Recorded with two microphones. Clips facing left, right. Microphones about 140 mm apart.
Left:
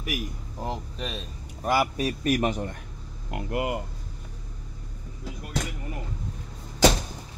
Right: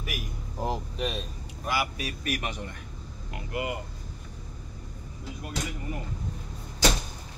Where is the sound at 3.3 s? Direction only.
55° left (ahead or behind).